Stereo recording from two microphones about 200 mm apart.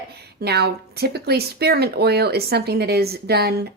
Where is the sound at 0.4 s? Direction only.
55° right (ahead or behind).